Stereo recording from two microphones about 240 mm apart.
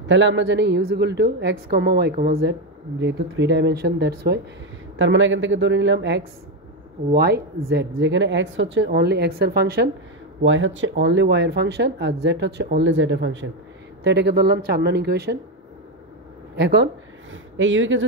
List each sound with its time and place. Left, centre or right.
0.1 s speech: right
10.4 s speech: right
16.5 s speech: right